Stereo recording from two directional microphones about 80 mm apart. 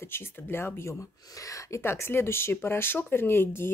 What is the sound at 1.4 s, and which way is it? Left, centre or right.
Speech, left.